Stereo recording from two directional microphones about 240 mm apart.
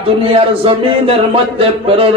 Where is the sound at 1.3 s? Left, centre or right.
Right.